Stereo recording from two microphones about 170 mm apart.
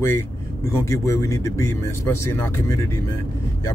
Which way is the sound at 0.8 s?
15° left (ahead or behind).